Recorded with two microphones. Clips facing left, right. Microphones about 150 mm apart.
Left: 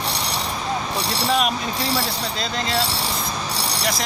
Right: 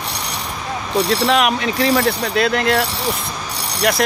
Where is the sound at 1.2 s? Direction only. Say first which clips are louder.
Right 5 dB; 75° right (ahead or behind).